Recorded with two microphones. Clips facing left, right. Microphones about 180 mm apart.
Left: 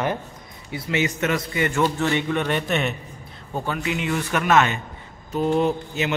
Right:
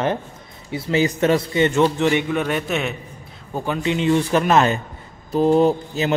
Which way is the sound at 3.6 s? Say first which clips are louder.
Right 7 dB; 25° right (ahead or behind).